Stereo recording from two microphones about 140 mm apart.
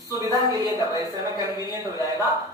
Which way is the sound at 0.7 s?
20° right (ahead or behind).